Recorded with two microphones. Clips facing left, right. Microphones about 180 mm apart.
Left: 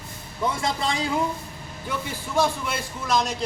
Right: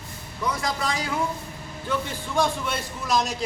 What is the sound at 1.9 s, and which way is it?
A man's voice, 5° left (ahead or behind).